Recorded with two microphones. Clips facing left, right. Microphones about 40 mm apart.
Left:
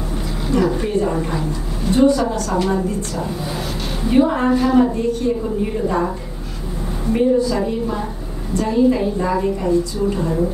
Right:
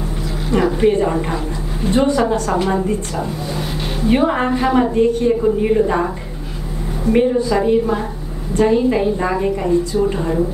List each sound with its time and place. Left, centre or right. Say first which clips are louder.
0.5 s a woman's voice: right 4 dB; right
2.5 s a woman's voice: right 1 dB; centre
3.2 s speech: right 1 dB; centre
4.1 s a woman's voice: left 1 dB; right
5.3 s a woman's voice: right 6 dB; right
7.1 s a woman's voice: right 1 dB; right